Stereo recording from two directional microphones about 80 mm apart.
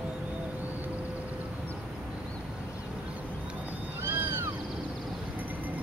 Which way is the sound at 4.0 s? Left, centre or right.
Right.